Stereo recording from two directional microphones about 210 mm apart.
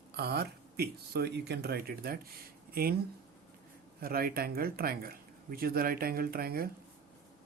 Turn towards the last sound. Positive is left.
turn(degrees=-45)  # may be behind; listen again after turning